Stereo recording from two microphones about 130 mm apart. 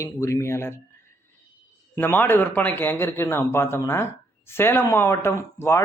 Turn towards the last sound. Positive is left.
turn(degrees=20)  # may be behind; listen again after turning